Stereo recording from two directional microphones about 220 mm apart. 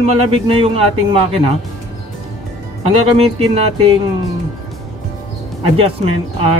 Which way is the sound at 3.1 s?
30° right (ahead or behind).